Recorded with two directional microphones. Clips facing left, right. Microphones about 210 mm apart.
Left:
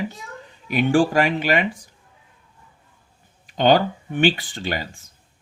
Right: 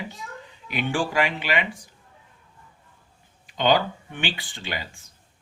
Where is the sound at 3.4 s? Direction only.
45° left (ahead or behind).